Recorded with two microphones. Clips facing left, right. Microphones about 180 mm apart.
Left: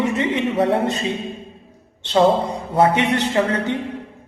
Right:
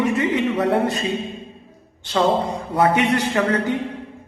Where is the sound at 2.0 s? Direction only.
25° left (ahead or behind).